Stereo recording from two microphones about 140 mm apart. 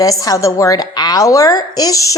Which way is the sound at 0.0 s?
25° left (ahead or behind).